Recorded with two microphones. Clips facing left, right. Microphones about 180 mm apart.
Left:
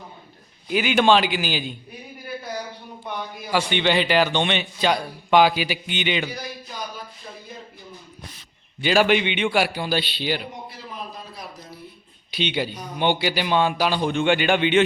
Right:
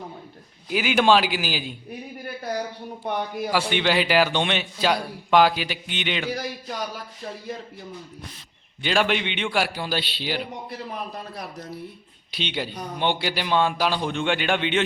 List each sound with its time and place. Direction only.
0.7 s a man's voice: 5° right (ahead or behind)
3.0 s a man's voice: 55° right (ahead or behind)
3.5 s a man's voice: 5° right (ahead or behind)
8.8 s a man's voice: 5° left (ahead or behind)
12.3 s a man's voice: centre (ahead or behind)